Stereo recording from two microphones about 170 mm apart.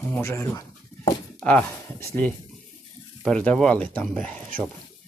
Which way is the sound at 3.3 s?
5° left (ahead or behind).